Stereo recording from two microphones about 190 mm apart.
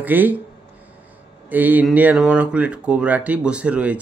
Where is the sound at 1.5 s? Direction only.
10° right (ahead or behind).